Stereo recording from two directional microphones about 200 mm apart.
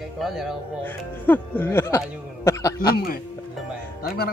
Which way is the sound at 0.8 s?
10° left (ahead or behind).